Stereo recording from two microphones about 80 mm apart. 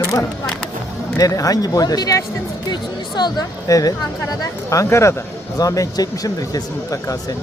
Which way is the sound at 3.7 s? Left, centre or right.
Left.